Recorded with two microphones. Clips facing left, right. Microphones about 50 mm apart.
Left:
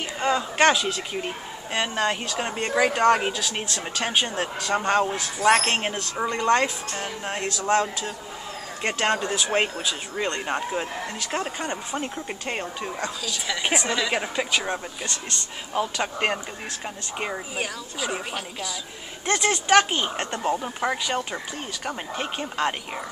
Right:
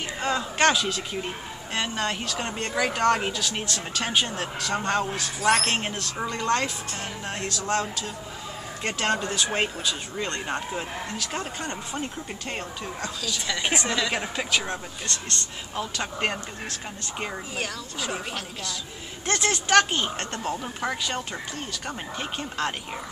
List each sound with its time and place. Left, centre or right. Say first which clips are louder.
0.2 s a man's voice: left 3 dB; centre; by 8.1 s left
8.8 s speech: left 2 dB; centre
13.2 s speech: right 2 dB; centre